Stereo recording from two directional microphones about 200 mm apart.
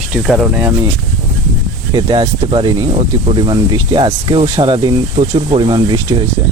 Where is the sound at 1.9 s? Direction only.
20° right (ahead or behind).